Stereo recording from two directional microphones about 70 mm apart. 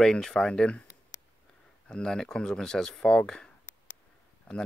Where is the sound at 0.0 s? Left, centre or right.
Centre.